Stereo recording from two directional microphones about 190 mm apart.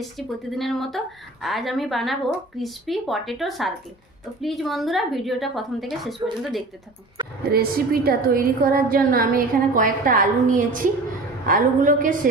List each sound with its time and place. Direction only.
0.6 s a woman's voice: centre (ahead or behind)
7.5 s a woman's voice: 50° right (ahead or behind)